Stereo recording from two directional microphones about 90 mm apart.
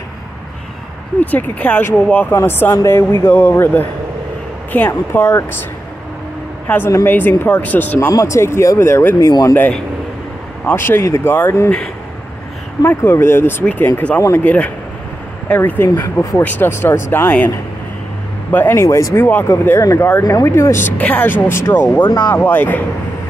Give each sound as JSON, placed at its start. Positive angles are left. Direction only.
{"t": 1.2, "sound": "speech", "side_deg": 15}
{"t": 6.7, "sound": "speech", "side_deg": 15}
{"t": 8.1, "sound": "speech", "side_deg": 35}
{"t": 9.3, "sound": "speech", "side_deg": 45}
{"t": 10.7, "sound": "speech", "side_deg": 25}
{"t": 12.8, "sound": "speech", "side_deg": 25}
{"t": 18.5, "sound": "speech", "side_deg": 20}
{"t": 19.1, "sound": "speech", "side_deg": 25}
{"t": 20.4, "sound": "speech", "side_deg": 30}
{"t": 21.0, "sound": "speech", "side_deg": 15}
{"t": 22.0, "sound": "speech", "side_deg": 50}
{"t": 22.3, "sound": "speech", "side_deg": 20}